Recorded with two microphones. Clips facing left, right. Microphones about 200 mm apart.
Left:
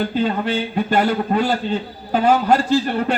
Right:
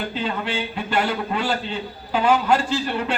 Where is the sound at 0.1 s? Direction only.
45° left (ahead or behind).